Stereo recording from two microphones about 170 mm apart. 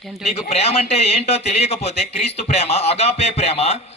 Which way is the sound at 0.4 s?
35° left (ahead or behind).